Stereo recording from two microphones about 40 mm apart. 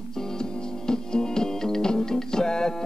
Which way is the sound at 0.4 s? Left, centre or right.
Centre.